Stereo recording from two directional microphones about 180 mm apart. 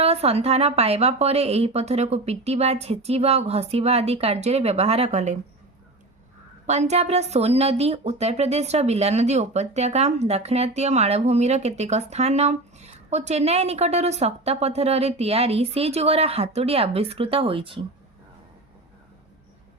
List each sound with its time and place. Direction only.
0.0 s speech: 35° right (ahead or behind)
6.7 s speech: 40° right (ahead or behind)